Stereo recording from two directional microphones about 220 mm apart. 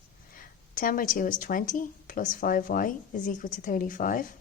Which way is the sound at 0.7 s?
40° left (ahead or behind).